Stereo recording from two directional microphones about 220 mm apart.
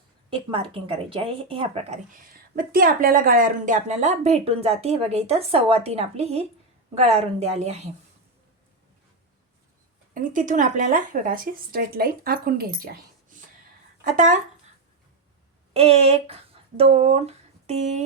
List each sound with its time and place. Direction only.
0.3 s speech: 25° right (ahead or behind)
10.2 s speech: 35° right (ahead or behind)
15.7 s speech: 25° right (ahead or behind)